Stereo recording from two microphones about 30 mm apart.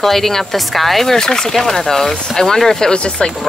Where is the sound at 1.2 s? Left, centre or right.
Centre.